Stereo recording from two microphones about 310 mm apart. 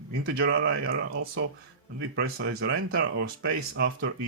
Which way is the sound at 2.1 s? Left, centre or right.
Right.